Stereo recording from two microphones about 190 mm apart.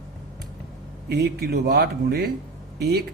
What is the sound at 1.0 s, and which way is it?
Speech, 55° right (ahead or behind).